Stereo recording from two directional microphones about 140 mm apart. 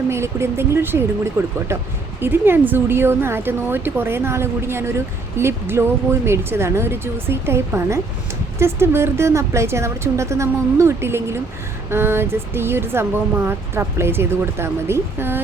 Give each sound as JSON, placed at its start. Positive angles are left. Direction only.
{"t": 0.1, "sound": "a woman's voice", "side_deg": -20}